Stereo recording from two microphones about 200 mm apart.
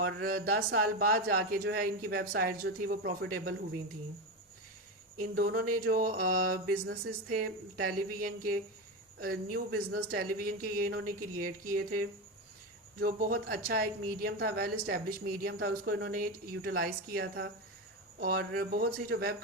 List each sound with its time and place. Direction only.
0.0 s a woman's voice: 45° right (ahead or behind)
5.3 s a woman's voice: 50° right (ahead or behind)